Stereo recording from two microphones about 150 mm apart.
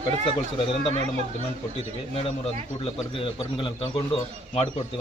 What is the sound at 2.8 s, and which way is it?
A man's voice, 35° left (ahead or behind).